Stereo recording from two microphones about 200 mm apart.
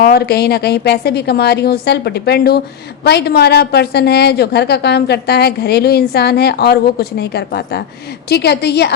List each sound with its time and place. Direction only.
0.0 s a woman's voice: 50° left (ahead or behind)